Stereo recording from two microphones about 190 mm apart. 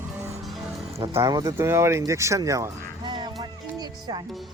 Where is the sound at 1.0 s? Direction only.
20° right (ahead or behind).